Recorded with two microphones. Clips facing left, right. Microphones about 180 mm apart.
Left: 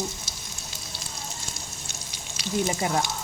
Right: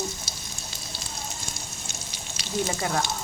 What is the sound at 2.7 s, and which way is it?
Speech, 20° left (ahead or behind).